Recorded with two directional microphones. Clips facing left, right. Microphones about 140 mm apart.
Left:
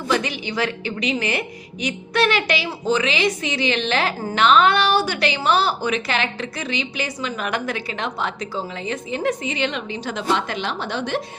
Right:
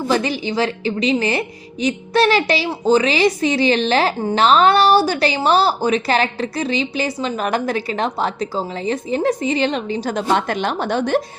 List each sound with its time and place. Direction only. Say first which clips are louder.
0.1 s a woman's voice: right 2 dB; 35° right (ahead or behind)